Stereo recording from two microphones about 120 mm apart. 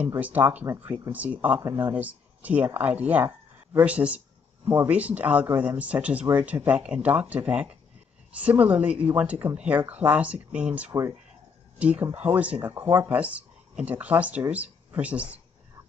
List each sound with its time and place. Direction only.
0.2 s speech: 15° right (ahead or behind)
1.6 s speech: 25° right (ahead or behind)